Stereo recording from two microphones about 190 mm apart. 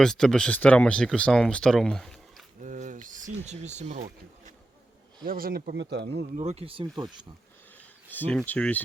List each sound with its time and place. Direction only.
0.0 s speech: centre (ahead or behind)
2.6 s a sound: 40° right (ahead or behind)
5.2 s speech: 50° right (ahead or behind); by 6.2 s 65° right (ahead or behind)
6.3 s speech: 35° right (ahead or behind)
8.1 s speech: 10° left (ahead or behind)